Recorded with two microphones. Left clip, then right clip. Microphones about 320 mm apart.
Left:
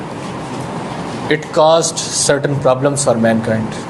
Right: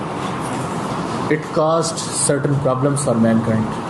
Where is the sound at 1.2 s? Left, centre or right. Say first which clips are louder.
Left 7 dB; left.